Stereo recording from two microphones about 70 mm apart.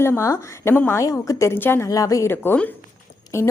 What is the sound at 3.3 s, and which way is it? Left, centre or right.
Speech, left.